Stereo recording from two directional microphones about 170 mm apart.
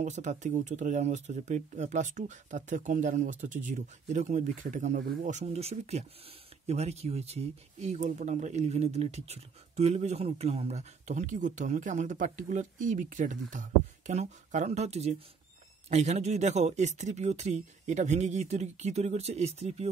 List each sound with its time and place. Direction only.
0.0 s speech: 45° right (ahead or behind)